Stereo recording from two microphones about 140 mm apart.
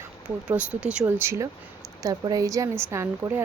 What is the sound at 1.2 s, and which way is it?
Speech, 20° right (ahead or behind).